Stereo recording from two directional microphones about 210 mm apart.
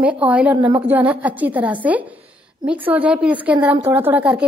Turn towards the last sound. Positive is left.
turn(degrees=-10)  # may be behind; listen again after turning